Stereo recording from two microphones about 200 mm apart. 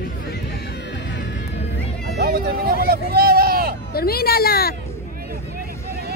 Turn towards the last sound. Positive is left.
turn(degrees=50)  # may be behind; listen again after turning